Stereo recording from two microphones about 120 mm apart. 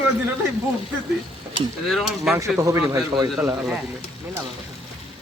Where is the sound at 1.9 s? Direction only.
Centre (ahead or behind).